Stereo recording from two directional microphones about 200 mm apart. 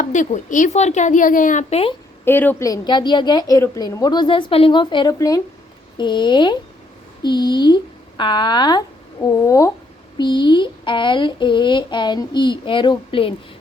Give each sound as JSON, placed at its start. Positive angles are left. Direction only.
{"t": 0.0, "sound": "speech", "side_deg": 40}
{"t": 2.2, "sound": "a child's voice", "side_deg": 10}